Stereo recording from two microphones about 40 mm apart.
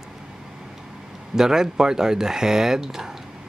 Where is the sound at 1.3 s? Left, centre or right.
Centre.